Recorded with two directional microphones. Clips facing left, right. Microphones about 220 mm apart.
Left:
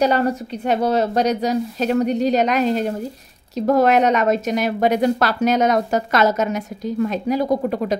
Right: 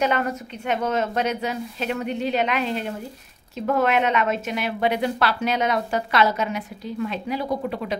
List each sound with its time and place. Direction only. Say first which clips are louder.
0.0 s a woman's voice: left 5 dB; 35° left (ahead or behind)